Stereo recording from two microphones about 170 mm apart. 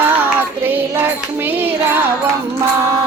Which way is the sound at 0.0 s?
10° right (ahead or behind).